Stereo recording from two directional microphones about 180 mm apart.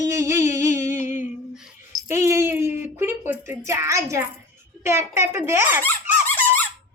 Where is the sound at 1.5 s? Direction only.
5° right (ahead or behind).